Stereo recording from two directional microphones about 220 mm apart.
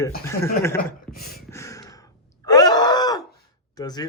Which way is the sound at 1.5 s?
15° left (ahead or behind).